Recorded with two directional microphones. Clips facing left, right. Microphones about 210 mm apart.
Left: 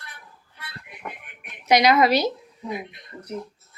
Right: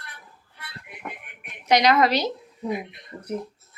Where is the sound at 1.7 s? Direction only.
10° left (ahead or behind).